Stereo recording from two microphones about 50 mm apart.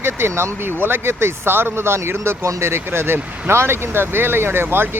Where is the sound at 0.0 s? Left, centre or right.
Right.